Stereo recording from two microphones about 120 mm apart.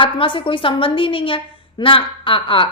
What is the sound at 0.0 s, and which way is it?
A woman's voice, 45° left (ahead or behind).